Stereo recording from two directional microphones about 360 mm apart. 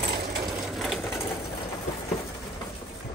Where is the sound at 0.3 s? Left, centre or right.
Centre.